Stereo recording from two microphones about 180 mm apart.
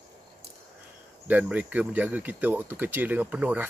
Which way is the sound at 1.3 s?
10° right (ahead or behind).